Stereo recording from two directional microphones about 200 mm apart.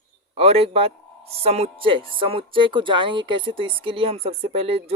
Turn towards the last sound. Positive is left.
turn(degrees=-30)  # may be behind; listen again after turning